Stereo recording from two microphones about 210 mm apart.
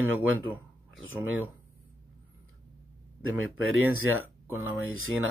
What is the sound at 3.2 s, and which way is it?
Speech, 80° right.